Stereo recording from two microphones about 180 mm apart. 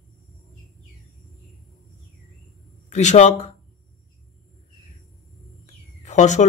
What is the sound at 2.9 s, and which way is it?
Speech, 40° left (ahead or behind).